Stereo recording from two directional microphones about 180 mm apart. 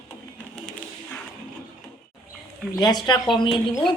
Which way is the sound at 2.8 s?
20° left (ahead or behind).